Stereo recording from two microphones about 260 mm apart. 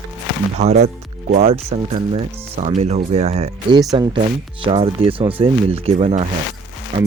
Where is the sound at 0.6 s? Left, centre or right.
Right.